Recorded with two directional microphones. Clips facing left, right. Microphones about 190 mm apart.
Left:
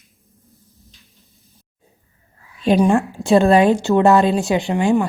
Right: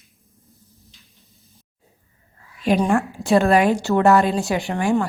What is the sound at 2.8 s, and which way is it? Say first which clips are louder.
A woman's voice: left 4 dB; 20° left (ahead or behind).